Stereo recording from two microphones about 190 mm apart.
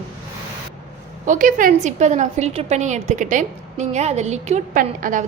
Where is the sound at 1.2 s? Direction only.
45° right (ahead or behind).